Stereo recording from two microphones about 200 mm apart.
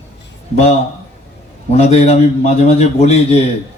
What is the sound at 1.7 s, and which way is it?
A man's voice, 35° left (ahead or behind).